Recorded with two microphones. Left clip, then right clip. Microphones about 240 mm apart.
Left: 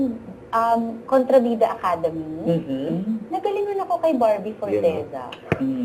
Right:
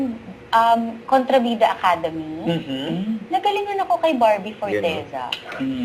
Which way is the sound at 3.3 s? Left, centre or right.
Centre.